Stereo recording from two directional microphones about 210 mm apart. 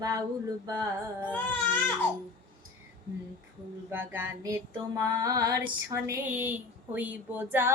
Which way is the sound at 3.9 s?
10° right (ahead or behind).